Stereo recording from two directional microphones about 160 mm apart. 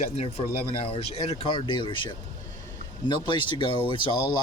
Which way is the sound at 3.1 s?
30° left (ahead or behind).